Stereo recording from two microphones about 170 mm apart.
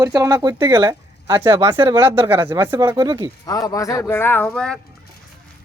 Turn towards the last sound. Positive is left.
turn(degrees=5)  # may be behind; listen again after turning